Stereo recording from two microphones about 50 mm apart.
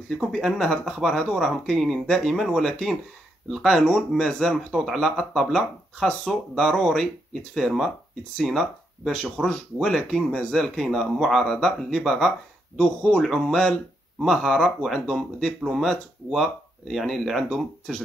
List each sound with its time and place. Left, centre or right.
0.3 s speech: centre
3.7 s speech: centre
9.1 s speech: centre
12.7 s speech: centre